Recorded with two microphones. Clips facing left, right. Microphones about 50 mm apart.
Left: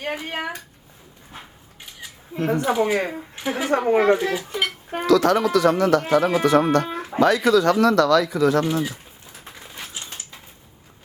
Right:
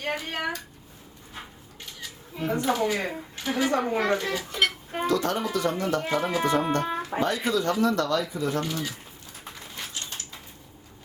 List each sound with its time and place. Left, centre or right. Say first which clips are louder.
0.0 s a child's voice: left 2 dB; centre
2.5 s a woman's voice: left 4 dB; centre
3.7 s a child's voice: left 9 dB; left
4.0 s a child's voice: left 7 dB; centre
4.9 s speech: left 8 dB; left
9.7 s mechanisms: left 1 dB; centre